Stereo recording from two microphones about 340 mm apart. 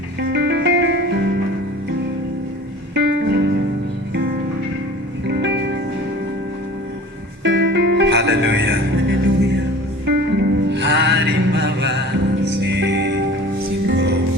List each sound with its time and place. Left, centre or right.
0.3 s music: right
2.9 s music: right
5.3 s music: right
7.4 s music: right